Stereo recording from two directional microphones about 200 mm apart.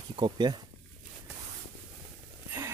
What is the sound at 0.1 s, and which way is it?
Speech, 25° right (ahead or behind).